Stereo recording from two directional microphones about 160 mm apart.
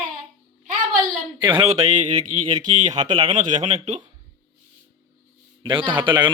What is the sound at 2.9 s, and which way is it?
Speech, 30° right (ahead or behind).